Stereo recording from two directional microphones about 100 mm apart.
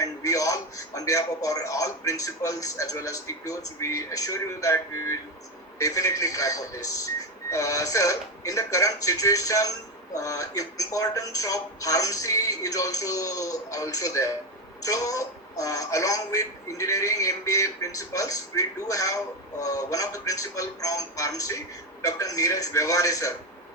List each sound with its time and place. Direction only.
0.0 s speech: 35° left (ahead or behind)